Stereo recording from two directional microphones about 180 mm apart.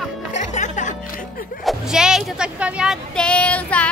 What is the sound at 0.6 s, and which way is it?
Music, 45° left (ahead or behind).